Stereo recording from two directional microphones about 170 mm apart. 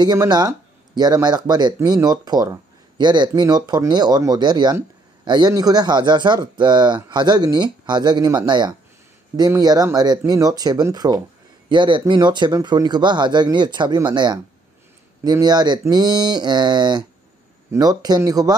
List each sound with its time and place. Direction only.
0.0 s speech: 25° right (ahead or behind)